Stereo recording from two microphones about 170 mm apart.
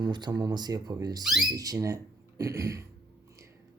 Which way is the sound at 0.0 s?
25° right (ahead or behind).